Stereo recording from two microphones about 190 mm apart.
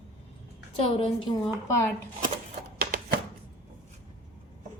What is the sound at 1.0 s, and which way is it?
Speech, 25° left (ahead or behind).